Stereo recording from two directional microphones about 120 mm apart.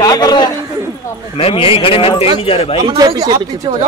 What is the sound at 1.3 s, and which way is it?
A man's voice, 50° left (ahead or behind).